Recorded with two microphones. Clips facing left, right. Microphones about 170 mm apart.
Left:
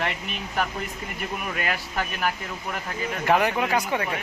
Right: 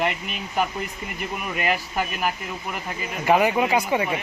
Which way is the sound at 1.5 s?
15° right (ahead or behind).